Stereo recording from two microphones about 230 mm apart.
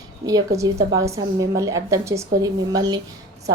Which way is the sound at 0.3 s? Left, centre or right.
Centre.